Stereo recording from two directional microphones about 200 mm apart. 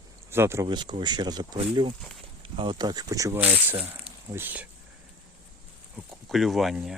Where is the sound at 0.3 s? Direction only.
10° right (ahead or behind).